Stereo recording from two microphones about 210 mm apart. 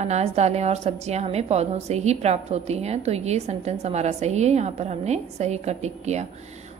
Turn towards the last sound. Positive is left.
turn(degrees=-30)  # may be behind; listen again after turning